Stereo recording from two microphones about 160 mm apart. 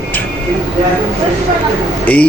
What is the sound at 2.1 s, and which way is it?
Speech, 10° left (ahead or behind).